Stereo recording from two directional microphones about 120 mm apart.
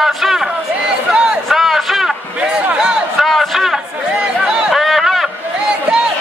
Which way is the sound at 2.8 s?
Centre (ahead or behind).